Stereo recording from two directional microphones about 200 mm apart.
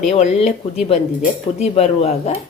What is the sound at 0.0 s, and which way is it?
A woman's voice, 35° left (ahead or behind).